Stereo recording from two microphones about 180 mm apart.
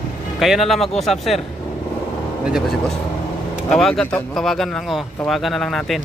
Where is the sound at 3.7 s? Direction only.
5° left (ahead or behind).